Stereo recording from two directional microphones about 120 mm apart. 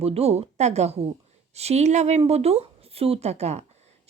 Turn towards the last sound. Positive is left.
turn(degrees=-65)  # may be behind; listen again after turning